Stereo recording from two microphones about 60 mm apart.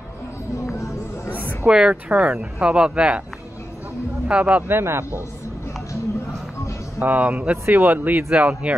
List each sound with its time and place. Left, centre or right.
1.3 s a sound: right
1.7 s speech: centre
4.3 s speech: right
4.6 s a man's voice: right
7.0 s a man's voice: right